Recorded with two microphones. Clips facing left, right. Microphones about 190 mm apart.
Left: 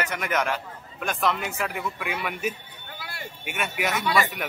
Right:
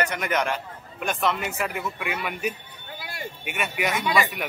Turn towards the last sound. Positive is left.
turn(degrees=-15)  # may be behind; listen again after turning